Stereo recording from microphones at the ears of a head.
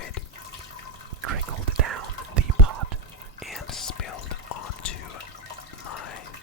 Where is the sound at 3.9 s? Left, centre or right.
Left.